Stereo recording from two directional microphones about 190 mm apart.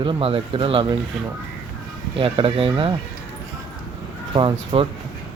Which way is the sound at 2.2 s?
25° right (ahead or behind).